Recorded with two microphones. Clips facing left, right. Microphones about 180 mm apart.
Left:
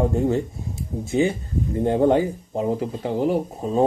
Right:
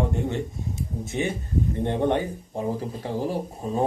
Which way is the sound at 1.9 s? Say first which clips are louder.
Left 7 dB; 30° left (ahead or behind).